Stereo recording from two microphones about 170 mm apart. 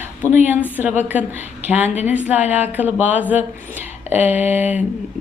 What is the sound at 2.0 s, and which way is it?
A woman's voice, 10° right (ahead or behind).